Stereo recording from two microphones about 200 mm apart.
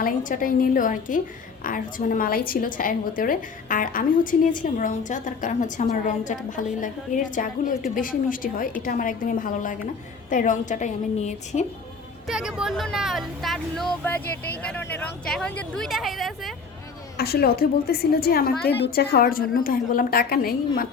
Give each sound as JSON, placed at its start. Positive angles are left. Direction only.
{"t": 0.0, "sound": "a woman's voice", "side_deg": 40}
{"t": 12.3, "sound": "speech", "side_deg": -5}
{"t": 17.2, "sound": "a woman's voice", "side_deg": 50}